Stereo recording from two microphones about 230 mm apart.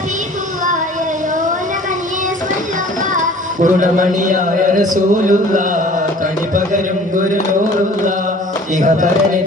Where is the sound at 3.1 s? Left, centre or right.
Right.